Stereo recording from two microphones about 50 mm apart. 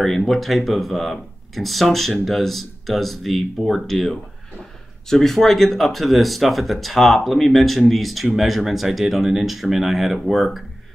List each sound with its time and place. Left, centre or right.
0.0 s speech: centre